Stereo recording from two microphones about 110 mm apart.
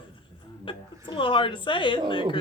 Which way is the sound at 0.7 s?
45° left (ahead or behind).